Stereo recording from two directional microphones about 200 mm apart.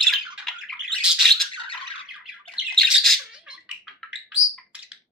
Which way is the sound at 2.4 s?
Centre (ahead or behind).